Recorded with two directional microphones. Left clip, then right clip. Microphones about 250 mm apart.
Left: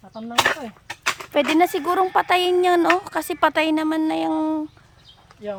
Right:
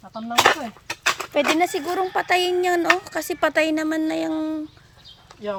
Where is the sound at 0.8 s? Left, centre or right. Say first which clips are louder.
Right 2 dB; centre.